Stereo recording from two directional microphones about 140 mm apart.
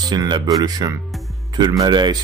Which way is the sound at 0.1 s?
30° right (ahead or behind).